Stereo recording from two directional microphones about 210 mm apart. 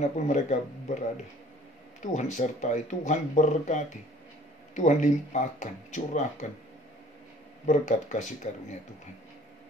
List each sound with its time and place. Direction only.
0.0 s speech: 35° left (ahead or behind)
2.0 s speech: 35° left (ahead or behind)
7.6 s speech: 35° left (ahead or behind)